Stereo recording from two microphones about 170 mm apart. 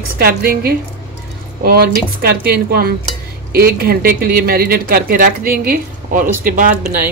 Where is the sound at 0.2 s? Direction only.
60° right (ahead or behind).